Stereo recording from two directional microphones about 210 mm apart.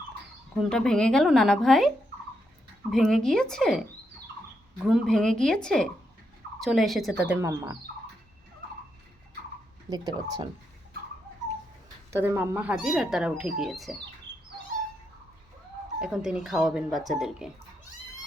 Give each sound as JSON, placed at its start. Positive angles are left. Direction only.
{"t": 0.5, "sound": "speech", "side_deg": 0}
{"t": 2.9, "sound": "speech", "side_deg": 0}
{"t": 4.8, "sound": "speech", "side_deg": 0}
{"t": 9.9, "sound": "speech", "side_deg": -20}
{"t": 12.1, "sound": "speech", "side_deg": -10}
{"t": 16.0, "sound": "speech", "side_deg": -5}